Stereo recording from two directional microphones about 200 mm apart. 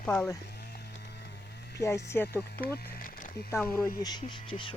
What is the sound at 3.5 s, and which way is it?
Speech, 10° left (ahead or behind).